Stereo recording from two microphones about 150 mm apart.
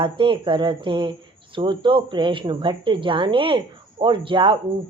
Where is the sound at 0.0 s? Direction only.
35° right (ahead or behind).